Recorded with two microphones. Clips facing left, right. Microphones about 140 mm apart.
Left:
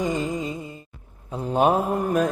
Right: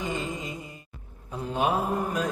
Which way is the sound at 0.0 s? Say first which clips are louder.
Left 7 dB; 40° left (ahead or behind).